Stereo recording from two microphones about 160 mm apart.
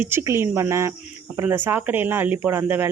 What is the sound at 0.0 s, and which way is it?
Speech, 15° right (ahead or behind).